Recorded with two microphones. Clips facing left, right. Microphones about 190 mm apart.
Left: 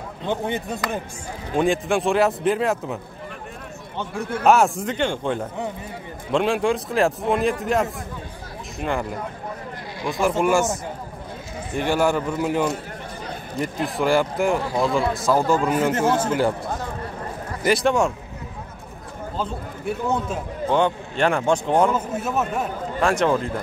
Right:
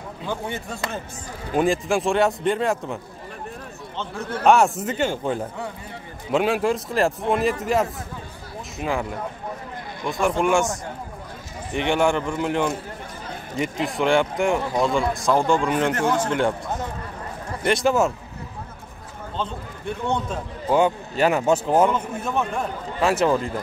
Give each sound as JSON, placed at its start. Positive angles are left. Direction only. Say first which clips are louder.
{"t": 0.3, "sound": "speech", "louder": "left 4 dB", "side_deg": 20}
{"t": 1.6, "sound": "a man's voice", "louder": "even", "side_deg": 0}
{"t": 4.5, "sound": "a man's voice", "louder": "even", "side_deg": 0}
{"t": 11.9, "sound": "a man's voice", "louder": "even", "side_deg": 5}
{"t": 17.6, "sound": "a man's voice", "louder": "even", "side_deg": 0}
{"t": 19.3, "sound": "a man's voice", "louder": "left 1 dB", "side_deg": 5}
{"t": 20.6, "sound": "speech", "louder": "right 1 dB", "side_deg": -10}
{"t": 21.9, "sound": "a man's voice", "louder": "left 1 dB", "side_deg": 5}